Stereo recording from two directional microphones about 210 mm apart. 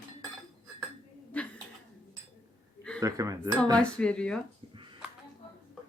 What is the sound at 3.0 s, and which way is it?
Speech, 15° right (ahead or behind).